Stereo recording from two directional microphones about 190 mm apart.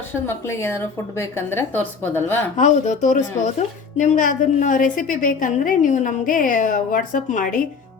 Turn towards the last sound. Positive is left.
turn(degrees=45)  # may be behind; listen again after turning